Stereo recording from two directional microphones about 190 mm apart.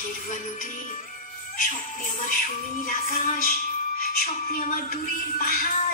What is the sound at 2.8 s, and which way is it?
Music, 45° left (ahead or behind).